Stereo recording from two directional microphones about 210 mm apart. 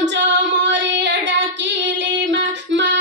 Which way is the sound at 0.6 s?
60° right (ahead or behind).